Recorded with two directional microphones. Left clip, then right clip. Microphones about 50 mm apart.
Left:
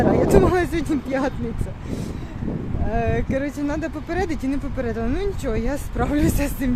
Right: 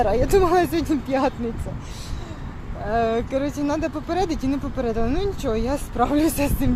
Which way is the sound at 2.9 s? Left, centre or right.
Left.